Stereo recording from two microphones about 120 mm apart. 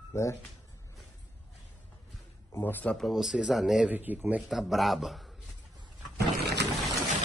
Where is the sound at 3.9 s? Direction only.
15° right (ahead or behind).